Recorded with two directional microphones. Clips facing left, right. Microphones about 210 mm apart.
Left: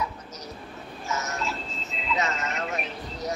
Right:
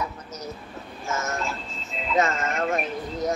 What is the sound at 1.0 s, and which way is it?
Music, 50° right (ahead or behind).